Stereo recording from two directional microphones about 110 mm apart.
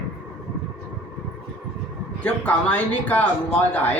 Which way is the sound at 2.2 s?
10° left (ahead or behind).